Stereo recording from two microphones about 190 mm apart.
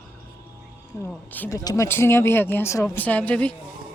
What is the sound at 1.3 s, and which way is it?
Speech, 10° left (ahead or behind).